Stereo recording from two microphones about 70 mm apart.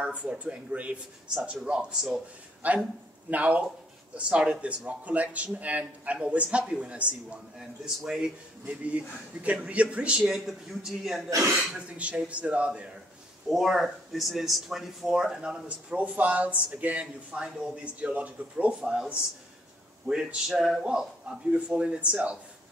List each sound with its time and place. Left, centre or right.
0.0 s speech: centre
7.5 s speech: centre
8.6 s speech: centre
10.2 s speech: centre
11.2 s speech: right
11.7 s speech: centre
13.5 s speech: centre